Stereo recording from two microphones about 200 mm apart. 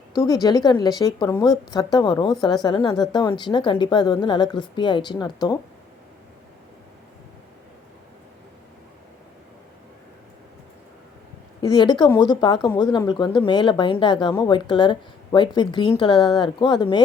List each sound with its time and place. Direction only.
0.4 s speech: 20° left (ahead or behind)
11.7 s speech: 20° left (ahead or behind)